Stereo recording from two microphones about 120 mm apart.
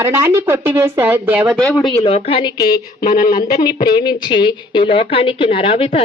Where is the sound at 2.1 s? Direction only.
55° left (ahead or behind).